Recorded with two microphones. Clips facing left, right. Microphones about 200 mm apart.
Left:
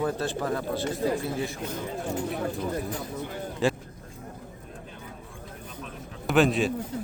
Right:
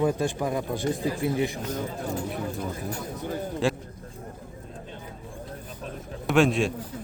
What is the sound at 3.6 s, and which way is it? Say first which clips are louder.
Speech: left 1 dB; centre (ahead or behind).